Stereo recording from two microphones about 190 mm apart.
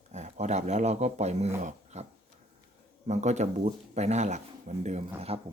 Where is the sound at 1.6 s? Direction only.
35° right (ahead or behind).